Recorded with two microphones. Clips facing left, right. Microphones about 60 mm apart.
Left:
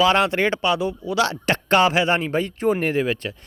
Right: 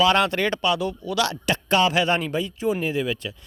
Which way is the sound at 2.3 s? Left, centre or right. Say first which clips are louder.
Left 3 dB; left.